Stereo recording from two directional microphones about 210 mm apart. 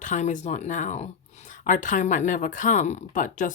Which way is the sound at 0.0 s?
35° left (ahead or behind).